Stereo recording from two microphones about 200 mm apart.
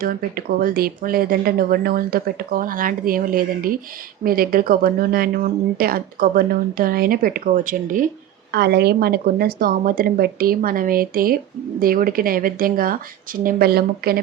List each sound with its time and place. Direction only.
0.0 s speech: 45° right (ahead or behind)
8.5 s speech: 55° right (ahead or behind)